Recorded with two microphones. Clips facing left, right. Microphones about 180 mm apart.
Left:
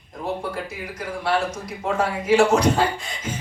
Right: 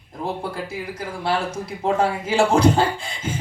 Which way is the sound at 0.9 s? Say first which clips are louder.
Left 1 dB; 30° right (ahead or behind).